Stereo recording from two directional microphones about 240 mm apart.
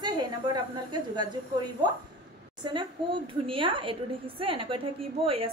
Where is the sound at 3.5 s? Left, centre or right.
Right.